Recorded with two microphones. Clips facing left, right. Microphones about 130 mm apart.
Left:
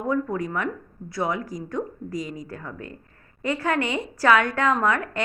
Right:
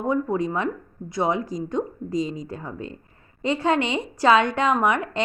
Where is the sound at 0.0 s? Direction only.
20° right (ahead or behind).